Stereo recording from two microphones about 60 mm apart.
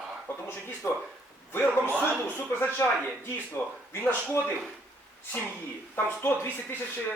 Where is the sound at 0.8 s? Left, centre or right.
Left.